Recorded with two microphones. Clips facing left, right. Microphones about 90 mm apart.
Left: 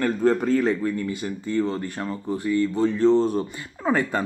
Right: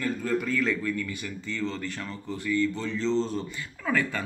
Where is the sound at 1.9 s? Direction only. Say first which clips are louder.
Left 7 dB; 35° left (ahead or behind).